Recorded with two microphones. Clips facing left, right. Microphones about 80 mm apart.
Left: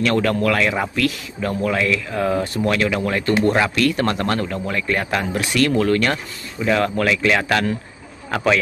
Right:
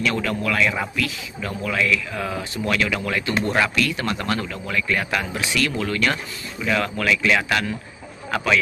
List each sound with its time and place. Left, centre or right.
0.0 s speech: left
2.7 s speech: left